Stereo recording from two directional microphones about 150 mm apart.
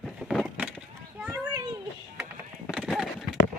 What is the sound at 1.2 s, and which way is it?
Children playing, 15° right (ahead or behind).